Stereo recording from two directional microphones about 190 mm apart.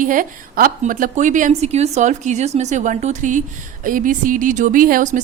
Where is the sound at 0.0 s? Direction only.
45° right (ahead or behind).